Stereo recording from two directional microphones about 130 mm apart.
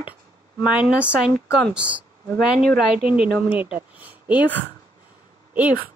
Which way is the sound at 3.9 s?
15° right (ahead or behind).